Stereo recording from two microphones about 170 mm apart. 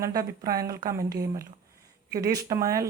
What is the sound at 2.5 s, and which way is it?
Speech, 20° right (ahead or behind).